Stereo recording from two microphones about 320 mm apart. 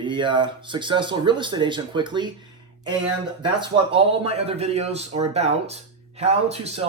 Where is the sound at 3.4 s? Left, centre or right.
Centre.